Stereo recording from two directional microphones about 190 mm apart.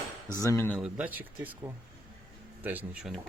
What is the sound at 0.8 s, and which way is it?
Speech, 10° right (ahead or behind).